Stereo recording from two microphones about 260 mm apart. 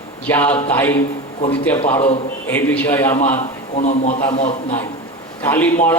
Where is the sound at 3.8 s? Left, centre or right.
Left.